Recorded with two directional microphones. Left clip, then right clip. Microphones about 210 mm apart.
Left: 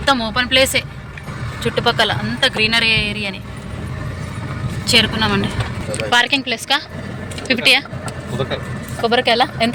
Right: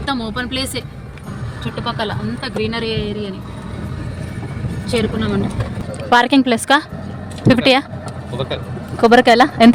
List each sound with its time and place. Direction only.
0.0 s speech: centre (ahead or behind)
4.9 s a woman's voice: 10° left (ahead or behind)
5.9 s speech: 25° right (ahead or behind)
9.0 s speech: 45° right (ahead or behind)